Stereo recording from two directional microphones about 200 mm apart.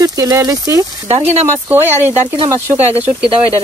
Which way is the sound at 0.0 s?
15° right (ahead or behind).